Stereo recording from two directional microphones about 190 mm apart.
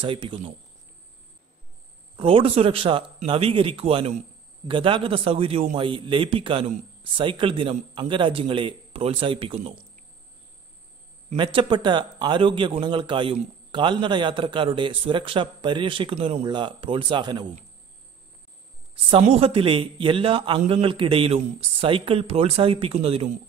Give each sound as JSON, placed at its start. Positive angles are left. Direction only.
{"t": 0.0, "sound": "a man's voice", "side_deg": -25}
{"t": 2.1, "sound": "a man's voice", "side_deg": -30}
{"t": 11.3, "sound": "a man's voice", "side_deg": -25}
{"t": 19.0, "sound": "a man's voice", "side_deg": -30}